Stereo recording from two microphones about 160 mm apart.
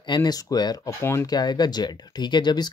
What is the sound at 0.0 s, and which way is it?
Speech, 25° left (ahead or behind).